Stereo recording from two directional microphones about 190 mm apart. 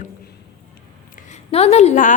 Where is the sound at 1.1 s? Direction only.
40° left (ahead or behind).